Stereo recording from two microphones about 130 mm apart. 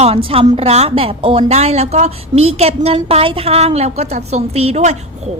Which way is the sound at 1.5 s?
55° right (ahead or behind).